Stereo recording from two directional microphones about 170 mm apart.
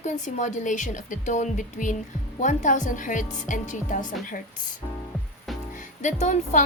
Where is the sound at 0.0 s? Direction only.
45° left (ahead or behind).